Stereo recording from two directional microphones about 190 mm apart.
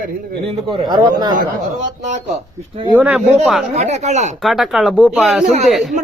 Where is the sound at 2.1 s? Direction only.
40° right (ahead or behind).